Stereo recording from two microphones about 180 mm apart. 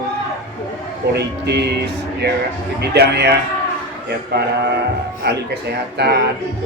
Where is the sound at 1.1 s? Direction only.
65° right (ahead or behind).